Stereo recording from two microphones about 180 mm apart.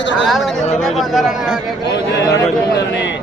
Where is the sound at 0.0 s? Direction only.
90° left.